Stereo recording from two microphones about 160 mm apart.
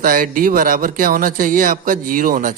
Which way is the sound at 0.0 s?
60° right (ahead or behind).